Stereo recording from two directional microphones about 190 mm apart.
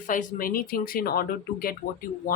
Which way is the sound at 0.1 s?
45° left (ahead or behind).